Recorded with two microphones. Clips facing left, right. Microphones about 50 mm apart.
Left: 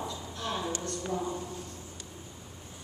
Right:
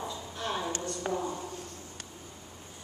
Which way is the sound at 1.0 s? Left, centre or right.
Right.